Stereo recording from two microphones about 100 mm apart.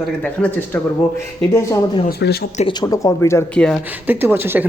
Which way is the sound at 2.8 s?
35° left (ahead or behind).